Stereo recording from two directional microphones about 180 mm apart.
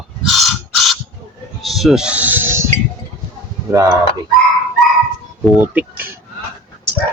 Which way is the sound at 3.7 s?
20° right (ahead or behind).